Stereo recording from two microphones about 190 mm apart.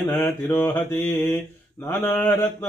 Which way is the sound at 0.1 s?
10° left (ahead or behind).